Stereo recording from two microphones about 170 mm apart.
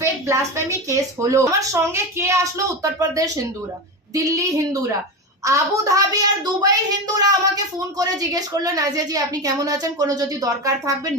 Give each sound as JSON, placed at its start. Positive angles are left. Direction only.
{"t": 0.0, "sound": "speech", "side_deg": -15}